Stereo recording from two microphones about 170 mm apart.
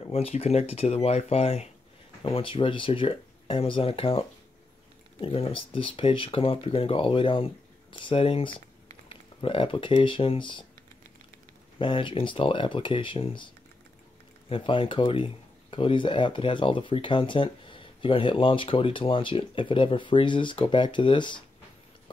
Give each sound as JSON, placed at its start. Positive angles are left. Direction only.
{"t": 0.0, "sound": "speech", "side_deg": 35}
{"t": 11.8, "sound": "speech", "side_deg": 30}
{"t": 14.5, "sound": "speech", "side_deg": 30}